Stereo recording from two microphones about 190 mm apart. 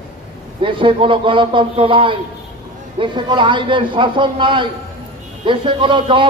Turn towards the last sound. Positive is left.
turn(degrees=-25)  # may be behind; listen again after turning